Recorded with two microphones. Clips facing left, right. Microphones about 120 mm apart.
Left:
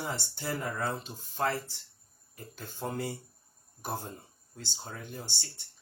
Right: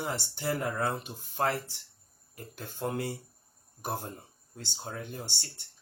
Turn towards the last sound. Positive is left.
turn(degrees=-60)  # may be behind; listen again after turning